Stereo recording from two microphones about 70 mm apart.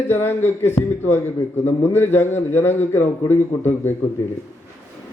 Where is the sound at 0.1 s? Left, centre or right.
Left.